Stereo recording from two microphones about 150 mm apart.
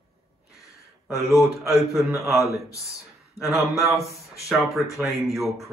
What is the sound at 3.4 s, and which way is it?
Speech, centre (ahead or behind).